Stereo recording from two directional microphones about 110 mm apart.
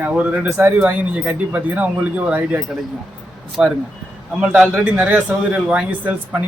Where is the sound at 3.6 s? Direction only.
10° right (ahead or behind).